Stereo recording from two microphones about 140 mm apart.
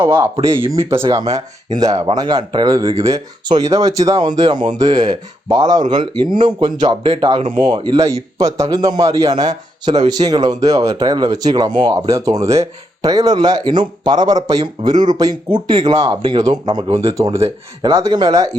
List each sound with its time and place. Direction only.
0.0 s speech: 20° right (ahead or behind)